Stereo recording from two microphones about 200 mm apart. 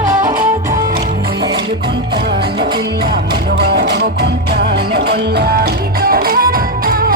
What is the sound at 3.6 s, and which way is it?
Music, 55° right (ahead or behind).